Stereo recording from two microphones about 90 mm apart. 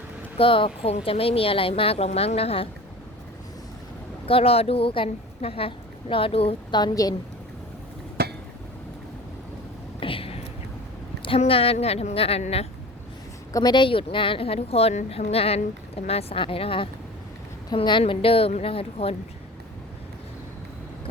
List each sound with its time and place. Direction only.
0.3 s a woman's voice: 80° left
4.3 s a woman's voice: 90° left
6.7 s a woman's voice: 45° left (ahead or behind)
10.0 s whispering: 85° left
11.2 s a woman's voice: 85° left
13.5 s a woman's voice: 50° left (ahead or behind); by 16.9 s 85° left
17.7 s a woman's voice: 70° left (ahead or behind); by 19.1 s 90° left